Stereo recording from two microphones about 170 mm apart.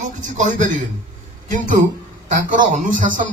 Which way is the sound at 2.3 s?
50° right (ahead or behind).